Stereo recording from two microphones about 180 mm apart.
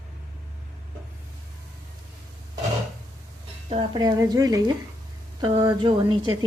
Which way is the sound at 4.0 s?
20° right (ahead or behind).